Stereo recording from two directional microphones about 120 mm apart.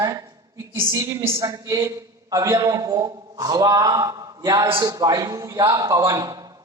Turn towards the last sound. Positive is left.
turn(degrees=-35)  # may be behind; listen again after turning